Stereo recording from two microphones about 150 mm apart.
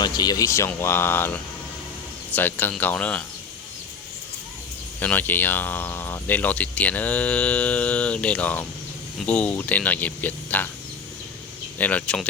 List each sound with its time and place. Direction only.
0.0 s speech: 25° left (ahead or behind); by 3.2 s 10° left (ahead or behind)
4.9 s speech: 10° left (ahead or behind)
11.8 s speech: 10° left (ahead or behind)